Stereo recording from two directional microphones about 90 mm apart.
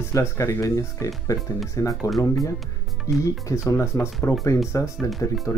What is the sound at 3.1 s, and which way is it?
Speech, 35° left (ahead or behind).